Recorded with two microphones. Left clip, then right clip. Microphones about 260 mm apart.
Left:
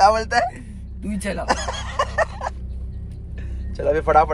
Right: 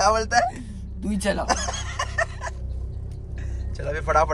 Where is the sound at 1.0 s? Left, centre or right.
Centre.